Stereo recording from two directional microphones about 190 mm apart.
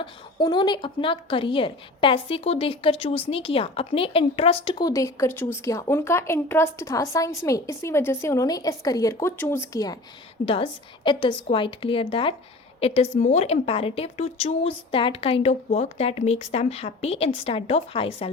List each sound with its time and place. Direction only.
0.0 s a woman's voice: 25° left (ahead or behind)